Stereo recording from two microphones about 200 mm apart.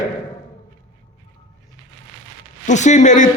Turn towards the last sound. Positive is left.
turn(degrees=40)  # may be behind; listen again after turning